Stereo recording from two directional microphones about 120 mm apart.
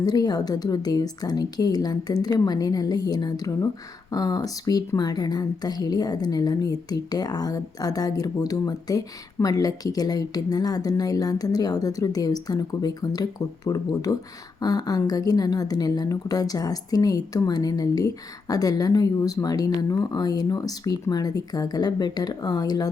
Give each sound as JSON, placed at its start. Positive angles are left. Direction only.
{"t": 0.0, "sound": "speech", "side_deg": 35}